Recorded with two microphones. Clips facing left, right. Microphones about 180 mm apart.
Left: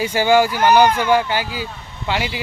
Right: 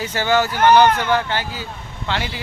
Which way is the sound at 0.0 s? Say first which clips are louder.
Left 4 dB; 10° left (ahead or behind).